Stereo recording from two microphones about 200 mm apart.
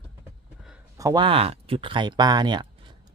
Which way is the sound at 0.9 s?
20° right (ahead or behind).